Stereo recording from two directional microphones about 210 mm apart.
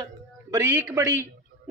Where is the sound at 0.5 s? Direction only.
10° right (ahead or behind).